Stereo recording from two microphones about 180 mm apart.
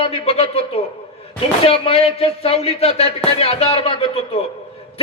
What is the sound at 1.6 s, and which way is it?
A man's voice, 30° left (ahead or behind).